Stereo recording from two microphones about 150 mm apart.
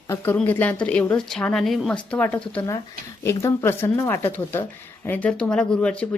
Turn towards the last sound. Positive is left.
turn(degrees=5)  # may be behind; listen again after turning